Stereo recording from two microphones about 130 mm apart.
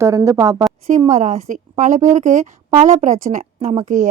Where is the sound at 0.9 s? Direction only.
70° right (ahead or behind).